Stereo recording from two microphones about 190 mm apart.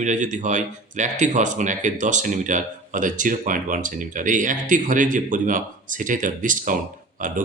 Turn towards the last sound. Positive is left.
turn(degrees=-45)  # may be behind; listen again after turning